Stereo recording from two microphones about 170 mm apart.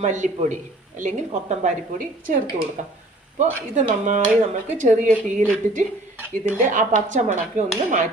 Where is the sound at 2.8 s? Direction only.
45° right (ahead or behind).